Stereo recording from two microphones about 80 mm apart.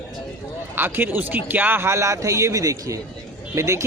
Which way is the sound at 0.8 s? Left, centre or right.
Right.